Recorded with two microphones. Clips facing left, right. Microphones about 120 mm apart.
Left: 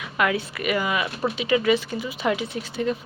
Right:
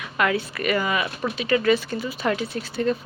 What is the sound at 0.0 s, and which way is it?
Speech, 15° left (ahead or behind).